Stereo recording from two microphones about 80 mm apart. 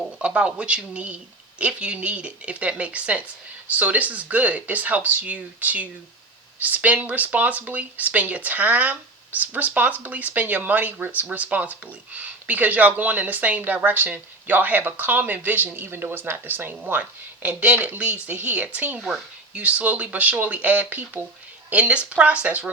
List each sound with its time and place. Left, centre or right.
0.2 s speech: centre
18.9 s speech: centre